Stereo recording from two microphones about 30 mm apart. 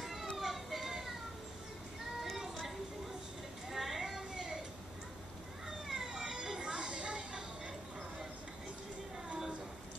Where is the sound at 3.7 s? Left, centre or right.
Centre.